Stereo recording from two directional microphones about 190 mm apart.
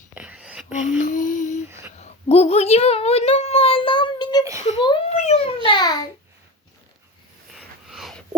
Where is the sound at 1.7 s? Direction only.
15° right (ahead or behind).